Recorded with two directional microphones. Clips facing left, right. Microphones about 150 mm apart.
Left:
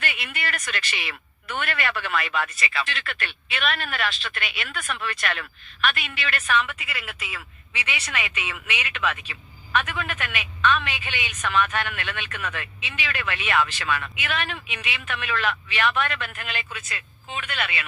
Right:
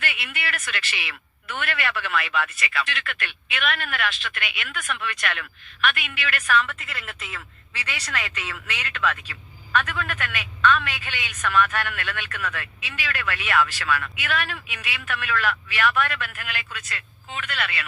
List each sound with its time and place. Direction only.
0.0 s speech: 45° left (ahead or behind)
6.6 s a woman's voice: 15° left (ahead or behind)
7.7 s speech: 15° left (ahead or behind)